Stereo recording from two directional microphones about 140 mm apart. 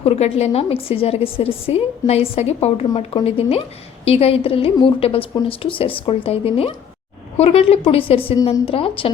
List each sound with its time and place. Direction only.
0.0 s a woman's voice: 50° left (ahead or behind)